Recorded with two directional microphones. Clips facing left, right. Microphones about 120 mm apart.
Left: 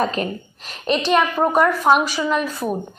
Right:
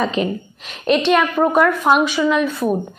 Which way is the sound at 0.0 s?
45° left (ahead or behind).